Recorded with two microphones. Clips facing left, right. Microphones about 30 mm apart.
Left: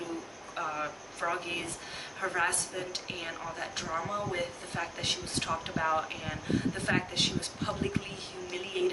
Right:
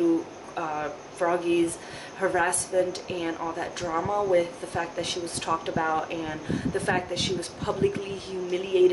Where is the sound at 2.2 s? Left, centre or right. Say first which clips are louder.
Right 9 dB; right.